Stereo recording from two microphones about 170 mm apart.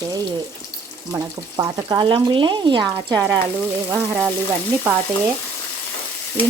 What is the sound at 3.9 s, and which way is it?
Speech, 10° right (ahead or behind).